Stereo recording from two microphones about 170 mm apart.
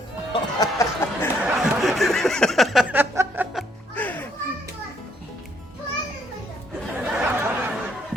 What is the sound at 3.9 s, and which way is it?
Music, 10° left (ahead or behind).